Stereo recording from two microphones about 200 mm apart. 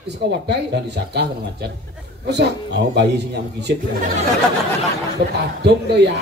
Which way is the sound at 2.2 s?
55° right (ahead or behind).